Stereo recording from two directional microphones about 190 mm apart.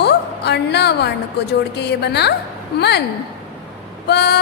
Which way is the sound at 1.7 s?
60° left (ahead or behind).